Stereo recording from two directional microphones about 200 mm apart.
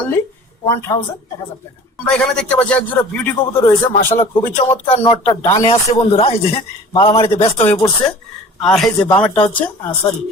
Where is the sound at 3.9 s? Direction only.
40° left (ahead or behind).